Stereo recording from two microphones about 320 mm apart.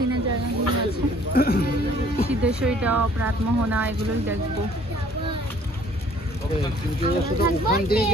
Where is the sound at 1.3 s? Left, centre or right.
Left.